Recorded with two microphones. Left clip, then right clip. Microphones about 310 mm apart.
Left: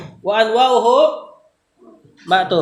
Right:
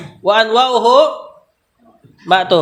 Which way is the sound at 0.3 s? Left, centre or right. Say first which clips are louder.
Right 2 dB; right.